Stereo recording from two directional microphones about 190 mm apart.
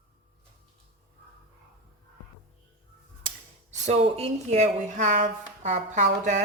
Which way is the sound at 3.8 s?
30° right (ahead or behind).